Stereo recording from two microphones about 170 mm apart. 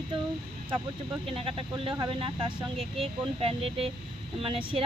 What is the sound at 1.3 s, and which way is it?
Speech, 30° right (ahead or behind).